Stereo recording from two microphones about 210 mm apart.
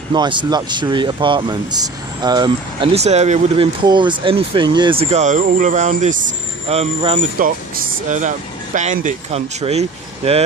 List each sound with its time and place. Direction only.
0.1 s speech: 20° right (ahead or behind)
7.4 s speech: 40° right (ahead or behind)
8.7 s speech: 35° right (ahead or behind)